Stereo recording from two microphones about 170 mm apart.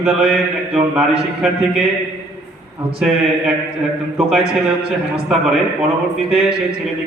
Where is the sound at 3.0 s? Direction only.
5° right (ahead or behind).